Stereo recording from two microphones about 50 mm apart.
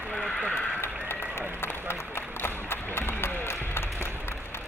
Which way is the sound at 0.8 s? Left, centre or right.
Left.